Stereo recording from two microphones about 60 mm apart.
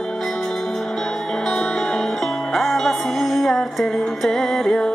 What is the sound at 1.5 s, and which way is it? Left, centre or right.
Music, centre.